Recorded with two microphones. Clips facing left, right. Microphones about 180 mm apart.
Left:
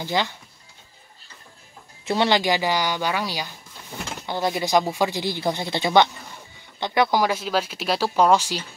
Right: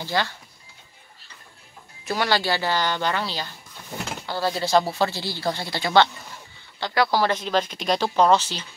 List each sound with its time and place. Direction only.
0.0 s speech: 20° left (ahead or behind)
2.0 s speech: 20° left (ahead or behind)